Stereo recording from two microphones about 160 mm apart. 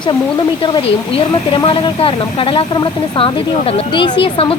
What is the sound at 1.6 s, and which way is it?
Speech, 30° left (ahead or behind).